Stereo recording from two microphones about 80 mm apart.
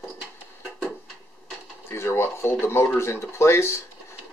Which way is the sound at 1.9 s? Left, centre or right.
Left.